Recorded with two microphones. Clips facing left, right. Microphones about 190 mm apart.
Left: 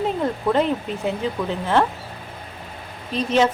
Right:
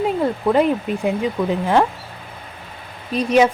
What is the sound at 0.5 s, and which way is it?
Speech, 10° right (ahead or behind).